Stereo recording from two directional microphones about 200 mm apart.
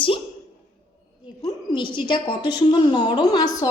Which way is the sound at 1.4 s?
25° left (ahead or behind).